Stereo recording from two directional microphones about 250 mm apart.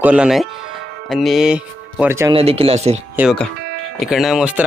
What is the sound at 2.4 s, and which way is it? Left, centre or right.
Speech, right.